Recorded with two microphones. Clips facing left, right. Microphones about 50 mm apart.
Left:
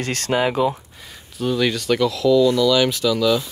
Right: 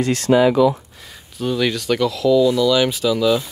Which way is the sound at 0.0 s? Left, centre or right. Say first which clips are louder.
Right 6 dB; left.